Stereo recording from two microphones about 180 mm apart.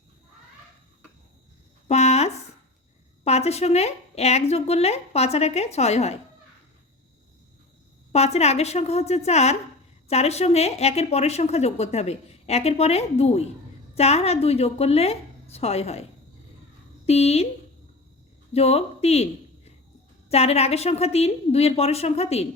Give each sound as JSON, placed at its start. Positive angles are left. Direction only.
{"t": 1.9, "sound": "a sound", "side_deg": 35}
{"t": 3.2, "sound": "a woman's voice", "side_deg": 35}
{"t": 8.1, "sound": "a woman's voice", "side_deg": 35}
{"t": 17.1, "sound": "a woman's voice", "side_deg": 35}
{"t": 18.5, "sound": "a woman's voice", "side_deg": 35}